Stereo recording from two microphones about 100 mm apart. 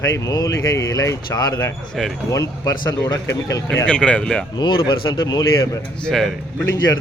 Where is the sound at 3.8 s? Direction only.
10° left (ahead or behind).